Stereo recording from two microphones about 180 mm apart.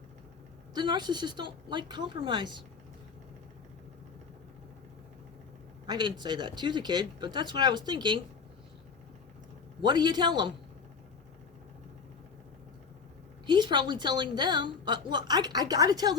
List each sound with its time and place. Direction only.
0.7 s a woman's voice: 25° right (ahead or behind)
5.8 s a woman's voice: 25° right (ahead or behind)
9.8 s a woman's voice: 25° right (ahead or behind)
13.5 s a woman's voice: 25° right (ahead or behind)